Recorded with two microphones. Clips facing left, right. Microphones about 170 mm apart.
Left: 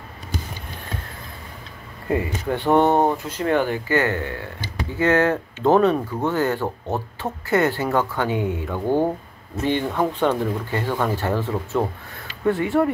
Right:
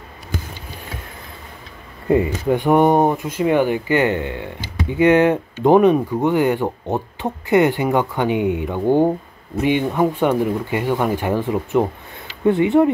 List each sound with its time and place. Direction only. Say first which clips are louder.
2.0 s speech: right 6 dB; 20° right (ahead or behind)